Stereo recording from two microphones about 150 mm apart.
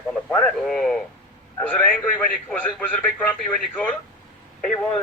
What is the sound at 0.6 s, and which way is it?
A man's voice, 5° left (ahead or behind).